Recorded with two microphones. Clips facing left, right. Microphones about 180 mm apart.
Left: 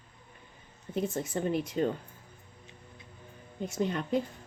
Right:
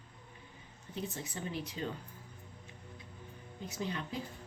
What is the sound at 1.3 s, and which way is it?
Speech, 55° left (ahead or behind).